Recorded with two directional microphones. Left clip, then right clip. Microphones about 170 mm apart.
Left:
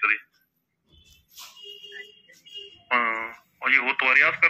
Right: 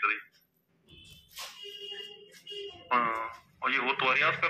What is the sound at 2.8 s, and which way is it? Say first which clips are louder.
Speech: left 4 dB; 35° left (ahead or behind).